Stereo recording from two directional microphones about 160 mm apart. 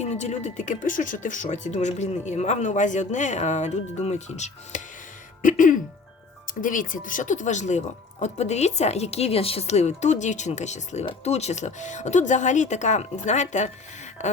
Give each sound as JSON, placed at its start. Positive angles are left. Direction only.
{"t": 0.0, "sound": "speech", "side_deg": 45}